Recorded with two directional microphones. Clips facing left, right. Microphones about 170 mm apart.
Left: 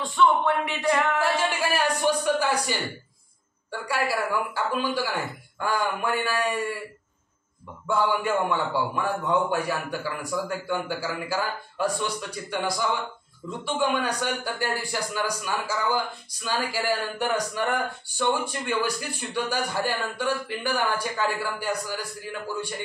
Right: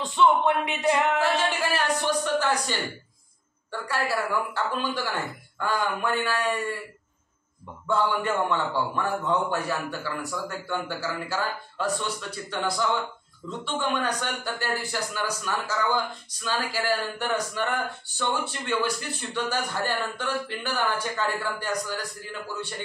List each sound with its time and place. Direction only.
0.0 s speech: 20° right (ahead or behind)
1.2 s a man's voice: 10° left (ahead or behind)
7.8 s a man's voice: 10° left (ahead or behind)